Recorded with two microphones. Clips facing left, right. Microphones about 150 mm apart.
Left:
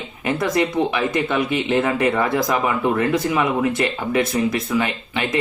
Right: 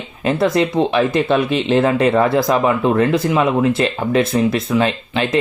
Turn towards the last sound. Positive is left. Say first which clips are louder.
# right 5 dB
turn(degrees=-30)  # may be behind; listen again after turning